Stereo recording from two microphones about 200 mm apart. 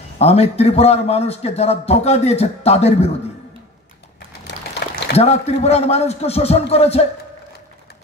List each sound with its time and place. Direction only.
0.2 s a man's voice: 30° left (ahead or behind)
4.5 s a sound: 60° left (ahead or behind)
5.1 s a man's voice: 30° left (ahead or behind)